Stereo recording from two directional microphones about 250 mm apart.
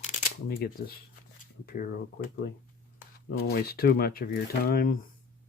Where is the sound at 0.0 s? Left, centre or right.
Left.